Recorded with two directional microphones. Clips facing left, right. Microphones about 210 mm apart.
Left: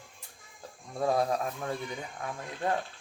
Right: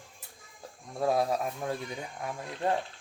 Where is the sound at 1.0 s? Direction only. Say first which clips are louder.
Even; 5° right (ahead or behind).